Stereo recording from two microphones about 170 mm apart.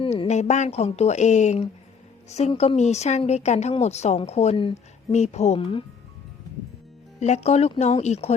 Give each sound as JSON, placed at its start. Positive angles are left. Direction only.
{"t": 0.0, "sound": "speech", "side_deg": 35}
{"t": 7.2, "sound": "speech", "side_deg": 40}